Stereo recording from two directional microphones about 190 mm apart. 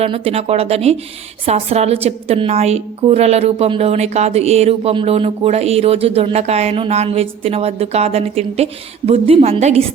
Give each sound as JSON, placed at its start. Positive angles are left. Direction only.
{"t": 0.0, "sound": "a woman's voice", "side_deg": -30}